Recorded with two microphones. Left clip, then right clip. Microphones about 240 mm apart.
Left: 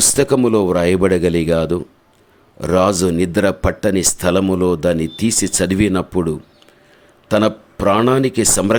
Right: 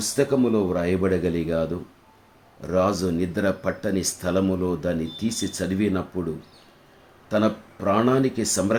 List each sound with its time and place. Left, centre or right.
0.0 s speech: left